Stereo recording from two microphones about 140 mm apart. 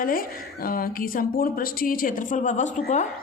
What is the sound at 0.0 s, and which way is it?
A woman's voice, 90° left.